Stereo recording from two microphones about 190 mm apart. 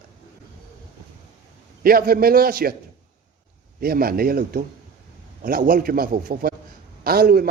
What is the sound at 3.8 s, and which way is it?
A man's voice, 50° right (ahead or behind).